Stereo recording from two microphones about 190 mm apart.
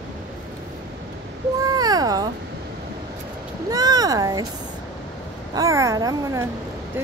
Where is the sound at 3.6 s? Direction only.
20° right (ahead or behind).